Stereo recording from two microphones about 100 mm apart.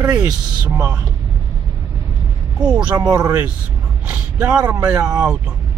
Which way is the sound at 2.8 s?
40° right (ahead or behind).